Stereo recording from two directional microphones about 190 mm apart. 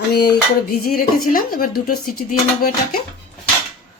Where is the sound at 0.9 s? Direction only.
50° left (ahead or behind).